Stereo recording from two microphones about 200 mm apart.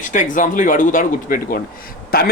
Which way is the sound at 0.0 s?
40° left (ahead or behind).